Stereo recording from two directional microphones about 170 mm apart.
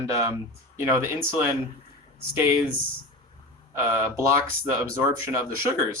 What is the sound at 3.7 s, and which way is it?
Speech, 15° right (ahead or behind).